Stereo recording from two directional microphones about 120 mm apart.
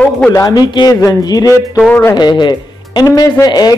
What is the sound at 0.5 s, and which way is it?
Speech, 35° left (ahead or behind).